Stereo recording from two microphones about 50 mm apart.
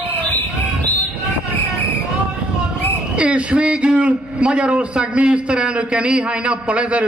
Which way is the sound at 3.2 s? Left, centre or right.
Right.